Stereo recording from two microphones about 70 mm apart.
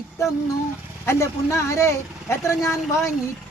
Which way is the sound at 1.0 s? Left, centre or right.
Left.